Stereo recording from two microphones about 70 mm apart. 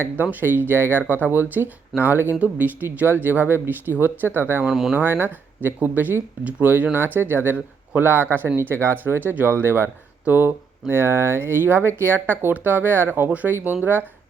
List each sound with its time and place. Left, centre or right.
0.0 s speech: right
4.7 s speech: centre
4.9 s speech: right